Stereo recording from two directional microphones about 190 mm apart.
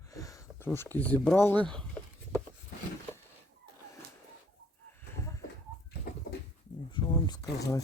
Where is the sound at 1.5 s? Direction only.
5° left (ahead or behind).